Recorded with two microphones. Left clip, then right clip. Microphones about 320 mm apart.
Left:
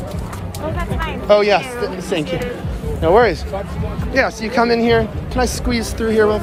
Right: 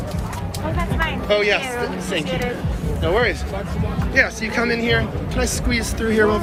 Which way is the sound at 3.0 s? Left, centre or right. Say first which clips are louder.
Left 7 dB; centre.